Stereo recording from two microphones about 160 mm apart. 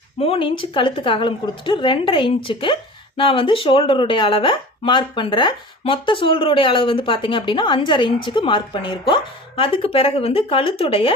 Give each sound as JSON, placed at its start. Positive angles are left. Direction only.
{"t": 0.2, "sound": "speech", "side_deg": 35}